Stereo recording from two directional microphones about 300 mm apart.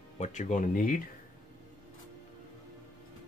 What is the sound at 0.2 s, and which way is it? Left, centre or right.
Speech, left.